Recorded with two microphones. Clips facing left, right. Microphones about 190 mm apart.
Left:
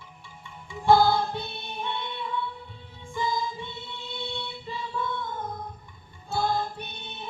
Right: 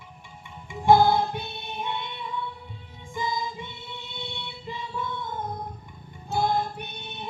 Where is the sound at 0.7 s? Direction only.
20° right (ahead or behind).